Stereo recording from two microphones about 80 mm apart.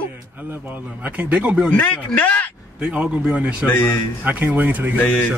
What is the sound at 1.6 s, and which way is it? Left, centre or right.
Speech, centre.